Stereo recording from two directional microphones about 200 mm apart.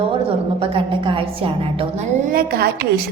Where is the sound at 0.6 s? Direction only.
25° right (ahead or behind).